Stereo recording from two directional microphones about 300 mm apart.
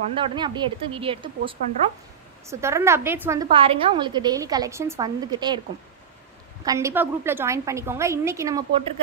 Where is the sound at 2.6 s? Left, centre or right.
Centre.